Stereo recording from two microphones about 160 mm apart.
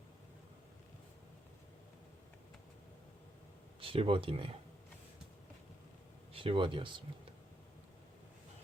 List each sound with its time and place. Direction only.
3.8 s speech: 35° right (ahead or behind)
6.3 s speech: 35° right (ahead or behind)